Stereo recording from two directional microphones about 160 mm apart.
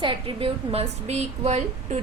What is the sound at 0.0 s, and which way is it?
A woman's voice, 35° right (ahead or behind).